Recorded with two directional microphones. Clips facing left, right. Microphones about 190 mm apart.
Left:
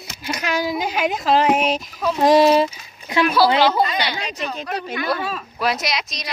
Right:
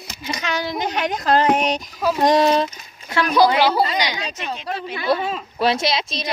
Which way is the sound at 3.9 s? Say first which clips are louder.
Right 1 dB; 15° right (ahead or behind).